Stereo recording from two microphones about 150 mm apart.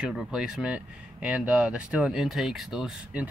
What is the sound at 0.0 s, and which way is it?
Speech, 5° right (ahead or behind).